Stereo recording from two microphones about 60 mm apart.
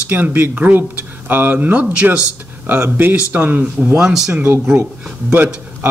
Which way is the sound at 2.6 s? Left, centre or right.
Right.